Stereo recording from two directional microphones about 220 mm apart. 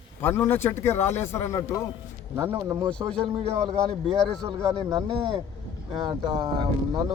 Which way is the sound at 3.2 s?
25° right (ahead or behind).